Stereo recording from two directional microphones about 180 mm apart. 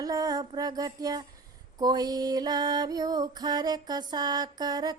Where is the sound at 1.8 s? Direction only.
20° right (ahead or behind).